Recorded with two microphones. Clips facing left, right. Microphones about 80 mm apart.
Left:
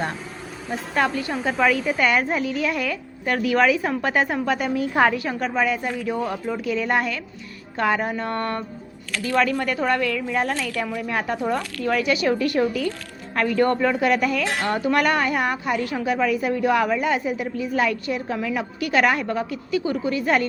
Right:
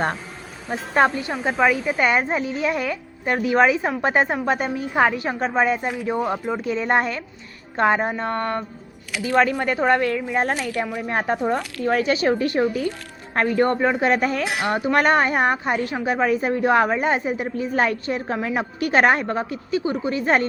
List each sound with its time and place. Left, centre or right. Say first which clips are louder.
0.7 s a woman's voice: right 4 dB; right
6.0 s a woman's voice: right 2 dB; centre
14.4 s a woman's voice: even; centre; by 20.5 s right